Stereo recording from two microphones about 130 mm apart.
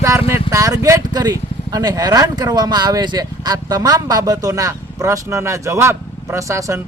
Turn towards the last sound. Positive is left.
turn(degrees=-25)  # may be behind; listen again after turning